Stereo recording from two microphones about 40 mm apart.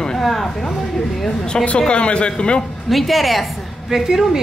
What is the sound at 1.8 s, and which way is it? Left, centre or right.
Speech, left.